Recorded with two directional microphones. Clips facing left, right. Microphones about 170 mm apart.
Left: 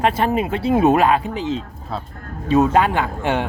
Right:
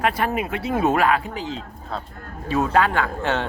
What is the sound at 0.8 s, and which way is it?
Speech, 20° left (ahead or behind).